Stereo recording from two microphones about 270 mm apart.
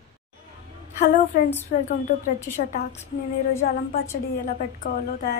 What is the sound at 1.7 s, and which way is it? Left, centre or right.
Speech, left.